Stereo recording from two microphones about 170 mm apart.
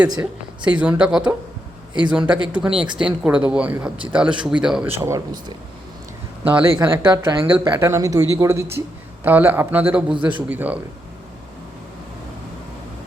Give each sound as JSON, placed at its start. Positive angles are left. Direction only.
{"t": 0.2, "sound": "speech", "side_deg": -10}
{"t": 10.1, "sound": "speech", "side_deg": -30}
{"t": 10.5, "sound": "speech", "side_deg": -10}